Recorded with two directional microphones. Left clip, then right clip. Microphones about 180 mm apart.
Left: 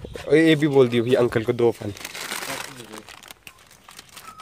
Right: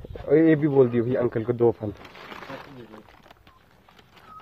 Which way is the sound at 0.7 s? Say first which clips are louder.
Left 3 dB; 40° left (ahead or behind).